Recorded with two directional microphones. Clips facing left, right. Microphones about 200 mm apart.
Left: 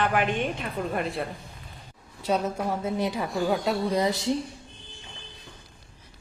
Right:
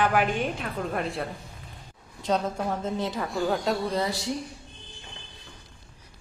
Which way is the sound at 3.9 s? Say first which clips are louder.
Left 3 dB; 20° left (ahead or behind).